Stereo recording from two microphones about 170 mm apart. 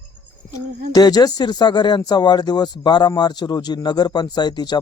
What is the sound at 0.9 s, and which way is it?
Speech, 25° left (ahead or behind).